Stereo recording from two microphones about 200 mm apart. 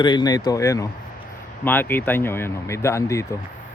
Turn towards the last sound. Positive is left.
turn(degrees=15)  # may be behind; listen again after turning